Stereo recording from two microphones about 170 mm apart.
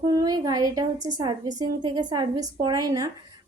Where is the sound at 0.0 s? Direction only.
20° right (ahead or behind).